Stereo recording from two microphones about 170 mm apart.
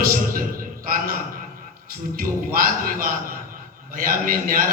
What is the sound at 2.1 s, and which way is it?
A man's voice, 55° right (ahead or behind).